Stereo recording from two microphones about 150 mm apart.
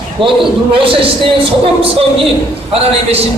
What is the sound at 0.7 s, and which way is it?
Speech, 35° right (ahead or behind).